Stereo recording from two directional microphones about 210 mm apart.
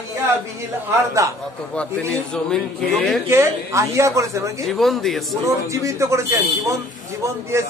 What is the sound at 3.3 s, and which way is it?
Speech, 15° right (ahead or behind).